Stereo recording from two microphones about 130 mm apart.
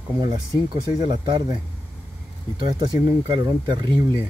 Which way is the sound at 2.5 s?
35° right (ahead or behind).